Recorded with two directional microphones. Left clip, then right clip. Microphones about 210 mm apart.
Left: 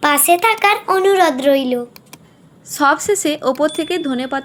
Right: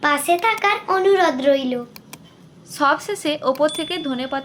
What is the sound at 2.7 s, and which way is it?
Speech, 20° left (ahead or behind).